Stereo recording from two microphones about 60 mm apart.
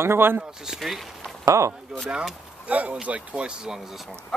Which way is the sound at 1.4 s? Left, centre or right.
Right.